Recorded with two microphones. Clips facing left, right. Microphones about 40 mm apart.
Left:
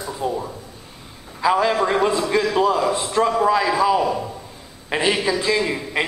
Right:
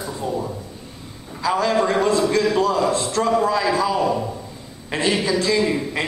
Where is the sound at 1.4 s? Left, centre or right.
Centre.